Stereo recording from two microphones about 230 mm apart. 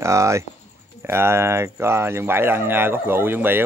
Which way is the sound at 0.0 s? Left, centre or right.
Centre.